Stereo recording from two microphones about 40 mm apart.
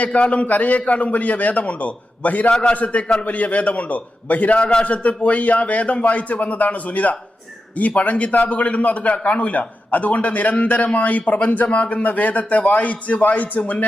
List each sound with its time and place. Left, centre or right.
0.0 s a man's voice: left
2.5 s a man's voice: left
2.7 s a man's voice: left
4.6 s a man's voice: left